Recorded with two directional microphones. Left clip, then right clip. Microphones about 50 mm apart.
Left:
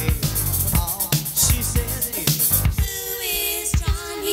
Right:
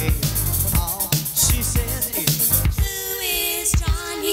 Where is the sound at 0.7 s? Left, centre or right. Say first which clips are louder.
Even; left.